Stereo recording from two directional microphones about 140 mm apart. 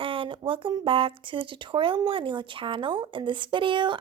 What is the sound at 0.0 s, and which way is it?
Speech, 40° right (ahead or behind).